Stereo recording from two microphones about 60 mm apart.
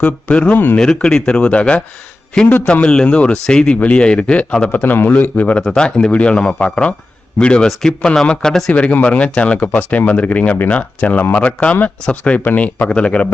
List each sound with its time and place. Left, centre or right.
0.0 s speech: left
0.8 s a man's voice: centre
2.8 s a man's voice: centre
4.7 s a man's voice: left
5.6 s a man's voice: centre
7.7 s speech: centre
8.7 s speech: left